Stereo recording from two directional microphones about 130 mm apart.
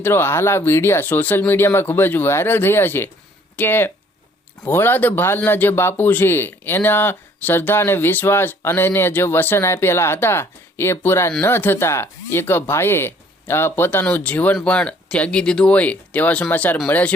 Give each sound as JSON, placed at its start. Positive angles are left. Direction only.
{"t": 0.0, "sound": "speech", "side_deg": 20}